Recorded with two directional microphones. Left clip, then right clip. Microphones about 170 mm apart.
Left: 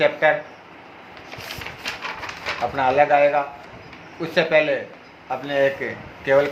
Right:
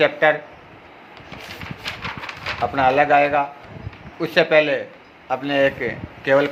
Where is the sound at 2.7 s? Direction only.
60° right (ahead or behind).